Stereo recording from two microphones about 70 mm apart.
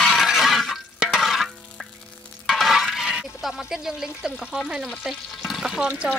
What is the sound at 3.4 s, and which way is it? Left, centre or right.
Speech, centre.